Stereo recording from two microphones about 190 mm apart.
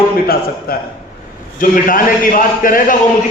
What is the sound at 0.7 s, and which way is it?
A man's voice, 50° left (ahead or behind).